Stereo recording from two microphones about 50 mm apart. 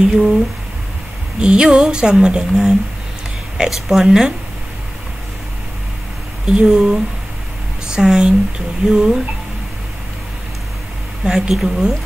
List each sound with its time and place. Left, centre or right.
0.0 s music: centre
1.4 s music: centre
2.5 s speech: centre
3.5 s music: centre
6.4 s music: centre
11.2 s music: centre